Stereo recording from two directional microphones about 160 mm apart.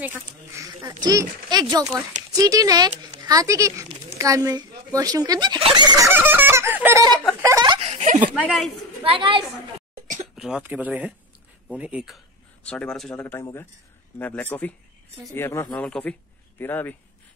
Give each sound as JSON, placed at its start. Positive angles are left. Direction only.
{"t": 0.6, "sound": "a sound", "side_deg": -20}
{"t": 1.0, "sound": "a woman's voice", "side_deg": -25}
{"t": 5.9, "sound": "fowl", "side_deg": -15}
{"t": 7.4, "sound": "laughter", "side_deg": -25}
{"t": 7.8, "sound": "a sound", "side_deg": -45}
{"t": 8.4, "sound": "a man's voice", "side_deg": -5}
{"t": 9.0, "sound": "a woman's voice", "side_deg": -35}
{"t": 10.3, "sound": "speech", "side_deg": -5}